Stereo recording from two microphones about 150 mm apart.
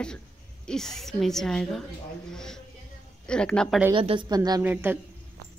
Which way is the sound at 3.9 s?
35° right (ahead or behind).